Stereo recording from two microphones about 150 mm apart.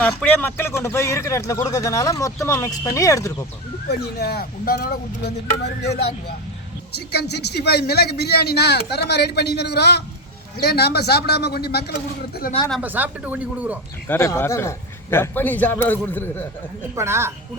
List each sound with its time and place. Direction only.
0.2 s speech: 10° left (ahead or behind)
3.8 s speech: 90° left
12.8 s speech: 10° right (ahead or behind)
14.1 s a man's voice: 15° left (ahead or behind)
16.9 s speech: 20° right (ahead or behind)